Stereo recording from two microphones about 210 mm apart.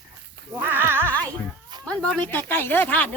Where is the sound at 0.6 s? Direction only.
10° right (ahead or behind).